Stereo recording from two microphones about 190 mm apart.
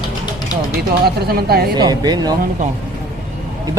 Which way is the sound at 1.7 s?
20° right (ahead or behind).